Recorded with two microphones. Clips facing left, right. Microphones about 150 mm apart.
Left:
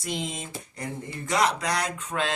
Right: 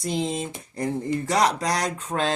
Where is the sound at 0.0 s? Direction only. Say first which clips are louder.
Right 6 dB; 30° right (ahead or behind).